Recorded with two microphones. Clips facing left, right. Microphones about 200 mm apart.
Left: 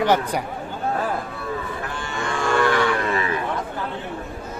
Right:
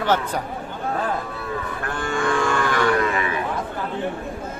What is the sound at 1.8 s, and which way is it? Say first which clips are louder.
Livestock: right 4 dB; 50° right (ahead or behind).